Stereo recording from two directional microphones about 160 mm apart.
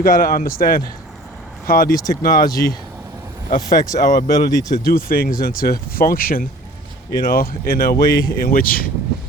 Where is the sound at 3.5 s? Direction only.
55° left (ahead or behind).